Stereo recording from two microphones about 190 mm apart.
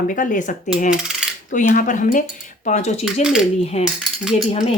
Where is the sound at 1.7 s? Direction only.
40° left (ahead or behind).